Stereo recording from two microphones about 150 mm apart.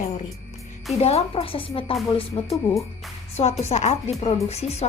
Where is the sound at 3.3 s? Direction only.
45° left (ahead or behind).